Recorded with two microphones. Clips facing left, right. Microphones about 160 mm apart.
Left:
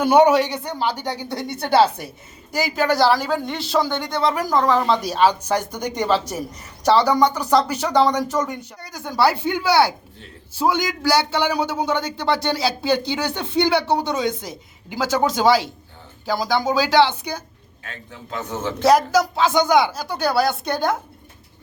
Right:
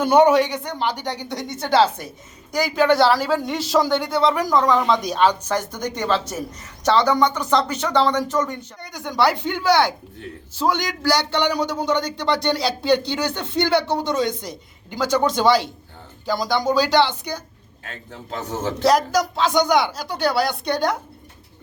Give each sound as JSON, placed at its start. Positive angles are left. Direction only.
{"t": 0.0, "sound": "speech", "side_deg": 10}
{"t": 18.1, "sound": "a man's voice", "side_deg": -35}
{"t": 18.9, "sound": "speech", "side_deg": 5}